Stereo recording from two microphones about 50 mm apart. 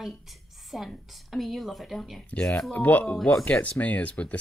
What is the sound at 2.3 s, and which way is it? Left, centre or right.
Speech, left.